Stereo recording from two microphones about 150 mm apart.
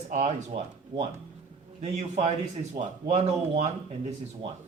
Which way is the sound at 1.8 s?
50° right (ahead or behind).